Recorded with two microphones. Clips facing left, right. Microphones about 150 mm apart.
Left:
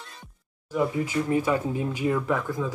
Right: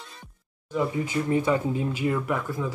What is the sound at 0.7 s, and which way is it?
Speech, 10° left (ahead or behind).